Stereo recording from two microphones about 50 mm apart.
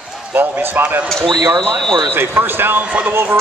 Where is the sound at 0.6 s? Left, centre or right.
Right.